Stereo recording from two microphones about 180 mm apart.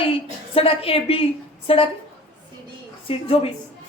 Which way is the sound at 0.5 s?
30° left (ahead or behind).